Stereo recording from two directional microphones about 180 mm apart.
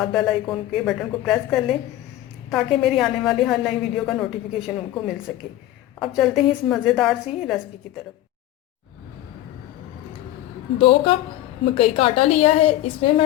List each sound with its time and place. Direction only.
0.0 s a woman's voice: centre (ahead or behind)
10.8 s a woman's voice: 30° left (ahead or behind)